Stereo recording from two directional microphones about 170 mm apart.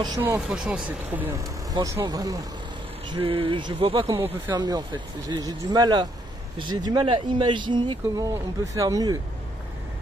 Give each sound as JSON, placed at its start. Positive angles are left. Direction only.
{"t": 0.5, "sound": "speech", "side_deg": -5}
{"t": 1.7, "sound": "speech", "side_deg": -20}
{"t": 3.1, "sound": "speech", "side_deg": -35}